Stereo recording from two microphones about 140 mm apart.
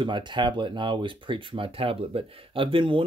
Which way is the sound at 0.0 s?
35° right (ahead or behind).